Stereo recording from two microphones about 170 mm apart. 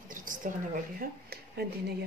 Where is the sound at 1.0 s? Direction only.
70° right (ahead or behind).